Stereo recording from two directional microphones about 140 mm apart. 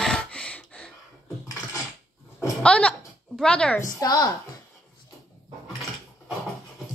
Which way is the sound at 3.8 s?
25° left (ahead or behind).